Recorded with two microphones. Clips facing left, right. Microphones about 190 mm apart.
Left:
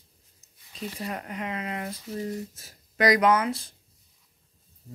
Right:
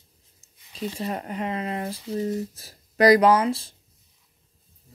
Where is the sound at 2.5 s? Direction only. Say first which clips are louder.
Right 6 dB; 35° right (ahead or behind).